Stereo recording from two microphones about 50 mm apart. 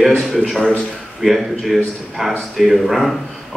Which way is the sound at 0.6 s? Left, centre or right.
Left.